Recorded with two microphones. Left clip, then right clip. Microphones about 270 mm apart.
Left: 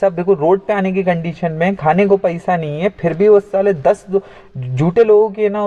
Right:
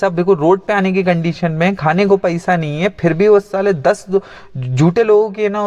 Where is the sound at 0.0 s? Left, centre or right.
Right.